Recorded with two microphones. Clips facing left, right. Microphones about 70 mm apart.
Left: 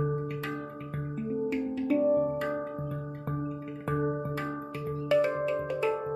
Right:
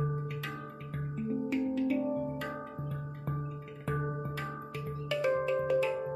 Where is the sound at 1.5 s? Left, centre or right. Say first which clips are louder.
Even; centre.